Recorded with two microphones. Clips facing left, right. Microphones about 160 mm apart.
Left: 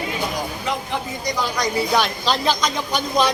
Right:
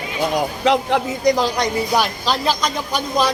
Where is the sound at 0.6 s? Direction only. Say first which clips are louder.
Right 12 dB; 90° right.